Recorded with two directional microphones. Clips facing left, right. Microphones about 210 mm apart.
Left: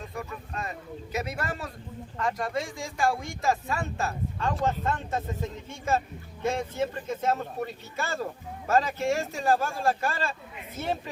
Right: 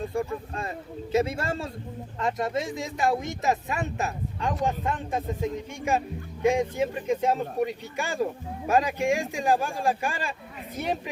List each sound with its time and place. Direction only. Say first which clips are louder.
0.0 s speech: right 8 dB; 30° right (ahead or behind); by 11.1 s 15° right (ahead or behind)